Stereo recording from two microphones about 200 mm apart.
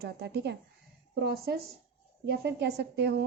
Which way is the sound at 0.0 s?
55° right (ahead or behind).